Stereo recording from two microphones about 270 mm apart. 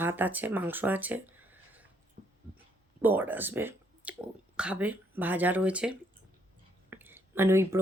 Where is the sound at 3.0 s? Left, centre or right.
Centre.